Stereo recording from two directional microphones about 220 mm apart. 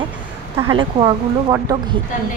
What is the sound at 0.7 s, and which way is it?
Speech, 20° right (ahead or behind).